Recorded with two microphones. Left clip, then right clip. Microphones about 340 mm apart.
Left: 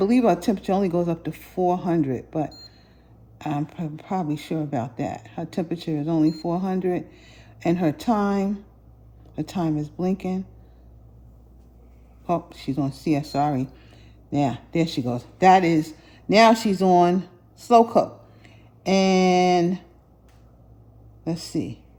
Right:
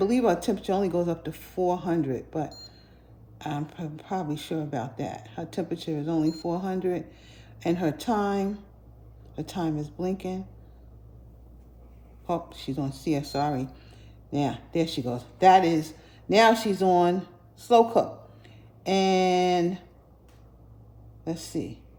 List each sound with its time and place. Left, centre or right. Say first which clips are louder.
0.1 s a woman's voice: left 4 dB; centre
12.2 s a woman's voice: left 5 dB; centre
13.7 s a sound: left 2 dB; left
14.7 s speech: left 3 dB; left
15.4 s speech: left 2 dB; left
21.2 s a woman's voice: left 4 dB; centre